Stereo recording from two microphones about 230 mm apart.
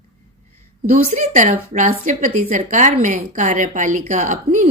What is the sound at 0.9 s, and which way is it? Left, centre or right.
A woman's voice, right.